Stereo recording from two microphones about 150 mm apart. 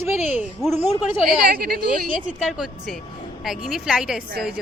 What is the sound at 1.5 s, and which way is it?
Speech, 75° right (ahead or behind).